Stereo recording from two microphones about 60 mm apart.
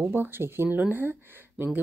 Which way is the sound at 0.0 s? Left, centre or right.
Right.